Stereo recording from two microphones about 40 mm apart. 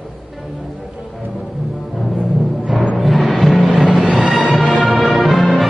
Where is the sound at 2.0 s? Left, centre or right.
Centre.